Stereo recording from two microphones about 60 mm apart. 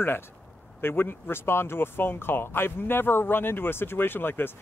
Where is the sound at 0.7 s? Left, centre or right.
Left.